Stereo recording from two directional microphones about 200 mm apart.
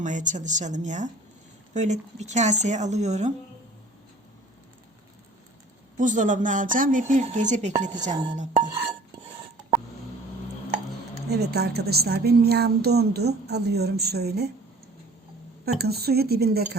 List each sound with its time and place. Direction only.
0.0 s speech: 40° right (ahead or behind)
6.0 s speech: 40° right (ahead or behind)
11.3 s a woman's voice: 55° right (ahead or behind)
15.6 s a woman's voice: 55° right (ahead or behind)